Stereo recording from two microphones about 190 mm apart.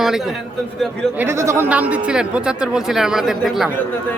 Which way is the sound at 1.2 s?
15° right (ahead or behind).